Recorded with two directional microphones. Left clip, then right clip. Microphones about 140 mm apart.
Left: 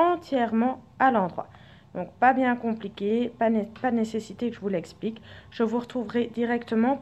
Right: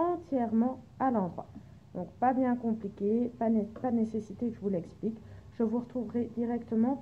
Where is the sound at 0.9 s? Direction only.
25° left (ahead or behind).